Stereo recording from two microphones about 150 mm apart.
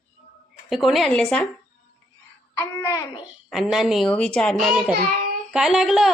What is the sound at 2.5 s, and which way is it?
Speech, 20° left (ahead or behind).